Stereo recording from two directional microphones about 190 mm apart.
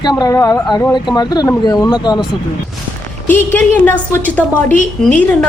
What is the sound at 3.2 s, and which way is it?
A woman's voice, 10° left (ahead or behind).